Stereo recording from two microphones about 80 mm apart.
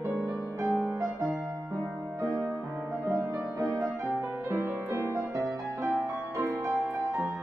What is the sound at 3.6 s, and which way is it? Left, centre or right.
Music, right.